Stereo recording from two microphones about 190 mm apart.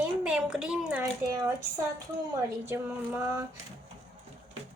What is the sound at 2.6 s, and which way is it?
Speech, 10° right (ahead or behind).